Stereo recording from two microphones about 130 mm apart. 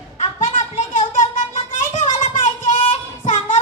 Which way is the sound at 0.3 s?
75° left (ahead or behind).